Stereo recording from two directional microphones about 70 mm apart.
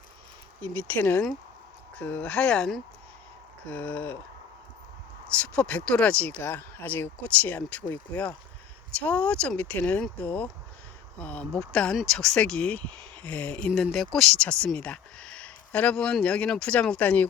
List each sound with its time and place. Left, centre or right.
0.6 s speech: left; by 2.8 s centre
3.7 s speech: left
5.4 s speech: centre
11.5 s speech: centre
13.9 s speech: centre